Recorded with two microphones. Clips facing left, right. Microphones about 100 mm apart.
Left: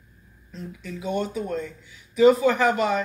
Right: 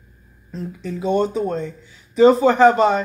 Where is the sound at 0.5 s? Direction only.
40° right (ahead or behind).